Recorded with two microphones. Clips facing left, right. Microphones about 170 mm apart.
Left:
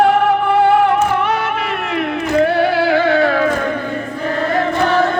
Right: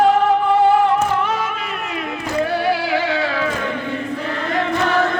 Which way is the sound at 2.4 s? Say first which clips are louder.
Left 4 dB; 60° left (ahead or behind).